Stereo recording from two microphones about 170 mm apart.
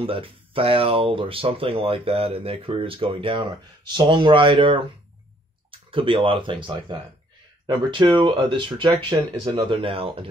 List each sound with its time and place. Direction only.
0.0 s speech: 30° right (ahead or behind)
9.1 s speech: 20° right (ahead or behind)
9.5 s speech: 30° right (ahead or behind)